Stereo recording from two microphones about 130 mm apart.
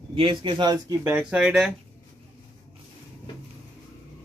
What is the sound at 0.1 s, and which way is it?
Music, 40° right (ahead or behind).